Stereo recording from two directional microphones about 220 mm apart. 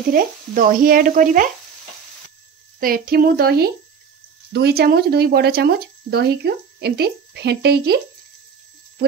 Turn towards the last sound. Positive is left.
turn(degrees=-50)  # may be behind; listen again after turning